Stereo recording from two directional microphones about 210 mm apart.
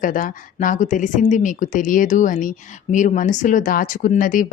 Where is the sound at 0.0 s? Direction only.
40° left (ahead or behind).